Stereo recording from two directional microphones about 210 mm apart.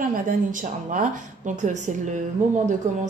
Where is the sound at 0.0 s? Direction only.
40° right (ahead or behind).